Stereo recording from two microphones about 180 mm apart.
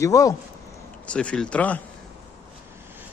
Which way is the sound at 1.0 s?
5° left (ahead or behind).